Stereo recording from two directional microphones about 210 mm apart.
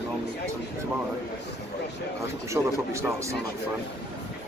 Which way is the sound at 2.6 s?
10° right (ahead or behind).